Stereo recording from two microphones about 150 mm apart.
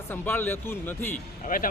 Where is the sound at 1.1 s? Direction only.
65° left (ahead or behind).